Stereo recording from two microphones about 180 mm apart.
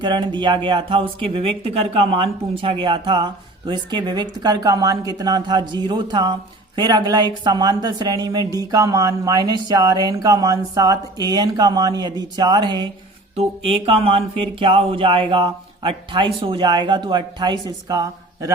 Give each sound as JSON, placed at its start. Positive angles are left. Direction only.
{"t": 0.0, "sound": "a woman's voice", "side_deg": -25}